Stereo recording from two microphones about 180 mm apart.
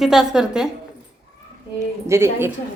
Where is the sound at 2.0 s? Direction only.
15° right (ahead or behind).